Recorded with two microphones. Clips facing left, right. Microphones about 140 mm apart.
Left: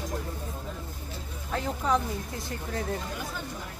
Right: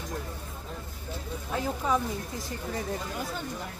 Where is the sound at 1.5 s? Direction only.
5° right (ahead or behind).